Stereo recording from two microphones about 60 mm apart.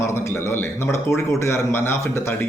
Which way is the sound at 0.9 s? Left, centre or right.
Left.